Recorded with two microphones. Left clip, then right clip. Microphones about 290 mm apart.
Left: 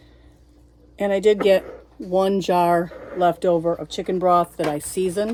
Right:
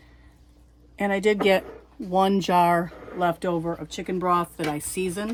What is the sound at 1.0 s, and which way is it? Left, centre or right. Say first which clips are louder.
Speech: left 4 dB; centre.